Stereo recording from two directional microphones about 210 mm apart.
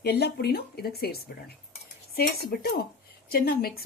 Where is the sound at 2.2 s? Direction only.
45° left (ahead or behind).